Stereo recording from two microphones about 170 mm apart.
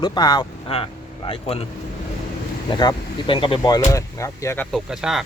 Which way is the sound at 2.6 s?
30° left (ahead or behind).